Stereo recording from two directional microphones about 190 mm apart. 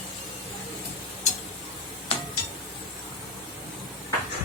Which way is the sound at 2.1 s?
30° left (ahead or behind).